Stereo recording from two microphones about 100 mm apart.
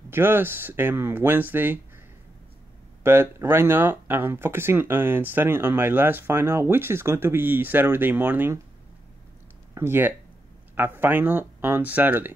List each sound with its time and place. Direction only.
0.1 s speech: 20° right (ahead or behind)
3.0 s speech: 25° right (ahead or behind)
9.8 s speech: 25° right (ahead or behind)